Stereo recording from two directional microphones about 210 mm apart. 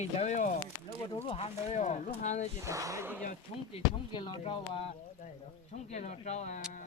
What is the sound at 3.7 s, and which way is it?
Speech, 25° left (ahead or behind).